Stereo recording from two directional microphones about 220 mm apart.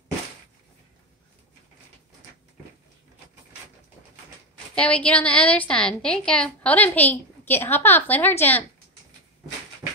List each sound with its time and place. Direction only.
4.7 s a woman's voice: 5° left (ahead or behind)